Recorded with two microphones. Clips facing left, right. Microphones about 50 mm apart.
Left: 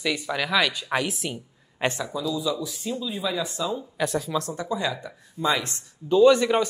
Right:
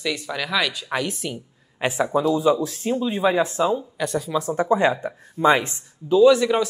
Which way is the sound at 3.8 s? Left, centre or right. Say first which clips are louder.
Right 1 dB; centre.